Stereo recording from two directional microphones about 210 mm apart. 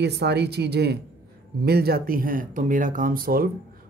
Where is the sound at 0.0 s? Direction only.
50° right (ahead or behind).